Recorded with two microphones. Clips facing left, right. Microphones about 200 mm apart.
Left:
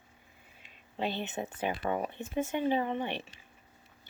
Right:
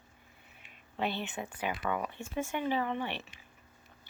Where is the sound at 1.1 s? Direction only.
20° left (ahead or behind).